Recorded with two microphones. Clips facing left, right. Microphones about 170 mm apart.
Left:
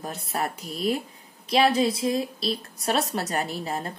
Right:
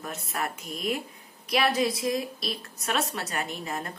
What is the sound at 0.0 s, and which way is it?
A woman's voice, 35° left (ahead or behind).